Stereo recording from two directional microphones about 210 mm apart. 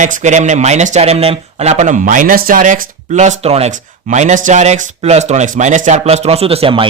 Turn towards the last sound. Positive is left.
turn(degrees=-25)  # may be behind; listen again after turning